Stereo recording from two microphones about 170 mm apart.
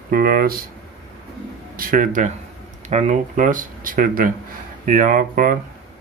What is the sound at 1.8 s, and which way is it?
Speech, 55° right (ahead or behind).